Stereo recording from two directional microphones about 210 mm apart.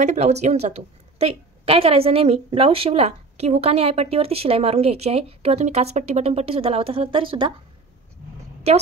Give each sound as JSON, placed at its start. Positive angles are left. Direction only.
{"t": 0.0, "sound": "a woman's voice", "side_deg": -30}
{"t": 8.6, "sound": "a woman's voice", "side_deg": -30}